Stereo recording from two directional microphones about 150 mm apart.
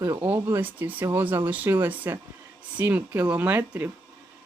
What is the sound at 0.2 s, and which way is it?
A woman's voice, 15° right (ahead or behind).